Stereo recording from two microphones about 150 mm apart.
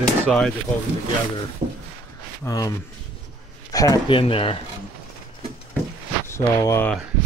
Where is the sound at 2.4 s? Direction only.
20° left (ahead or behind).